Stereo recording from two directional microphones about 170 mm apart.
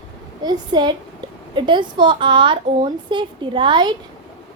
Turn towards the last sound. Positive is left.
turn(degrees=-25)  # may be behind; listen again after turning